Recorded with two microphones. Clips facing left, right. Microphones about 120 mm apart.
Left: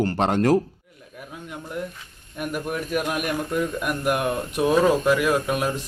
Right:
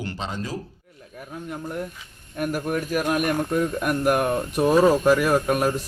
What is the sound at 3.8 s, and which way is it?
Speech, 45° right (ahead or behind).